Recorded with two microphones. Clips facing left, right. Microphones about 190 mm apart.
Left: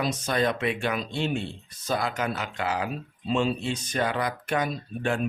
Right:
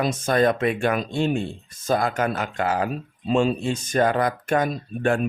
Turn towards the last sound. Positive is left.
turn(degrees=-50)  # may be behind; listen again after turning